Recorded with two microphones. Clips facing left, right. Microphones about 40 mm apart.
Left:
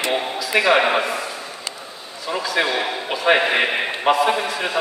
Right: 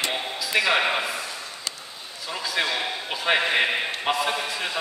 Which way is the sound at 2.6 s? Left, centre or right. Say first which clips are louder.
Left 5 dB; left.